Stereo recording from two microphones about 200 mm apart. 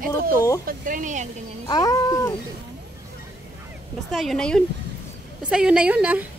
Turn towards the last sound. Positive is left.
turn(degrees=-10)  # may be behind; listen again after turning